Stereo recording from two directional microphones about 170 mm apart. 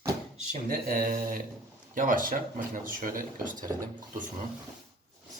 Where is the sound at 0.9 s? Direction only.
55° right (ahead or behind).